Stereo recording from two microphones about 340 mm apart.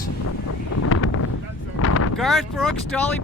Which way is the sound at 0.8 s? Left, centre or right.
Left.